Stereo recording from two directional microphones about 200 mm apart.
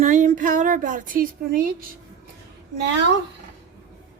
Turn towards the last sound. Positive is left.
turn(degrees=-60)  # may be behind; listen again after turning